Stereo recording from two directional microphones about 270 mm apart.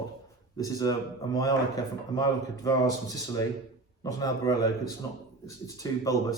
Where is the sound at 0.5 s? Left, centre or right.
Centre.